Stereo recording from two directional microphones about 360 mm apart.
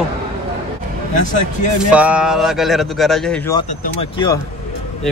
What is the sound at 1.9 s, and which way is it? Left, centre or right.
Speech, centre.